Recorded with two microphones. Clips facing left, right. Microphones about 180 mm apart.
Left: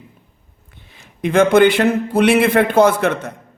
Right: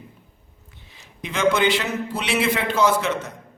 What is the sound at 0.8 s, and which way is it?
Speech, 55° left (ahead or behind).